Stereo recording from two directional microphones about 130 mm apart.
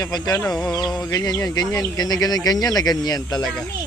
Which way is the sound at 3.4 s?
5° left (ahead or behind).